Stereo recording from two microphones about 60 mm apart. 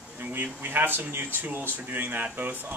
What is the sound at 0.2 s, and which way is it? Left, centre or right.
Speech, right.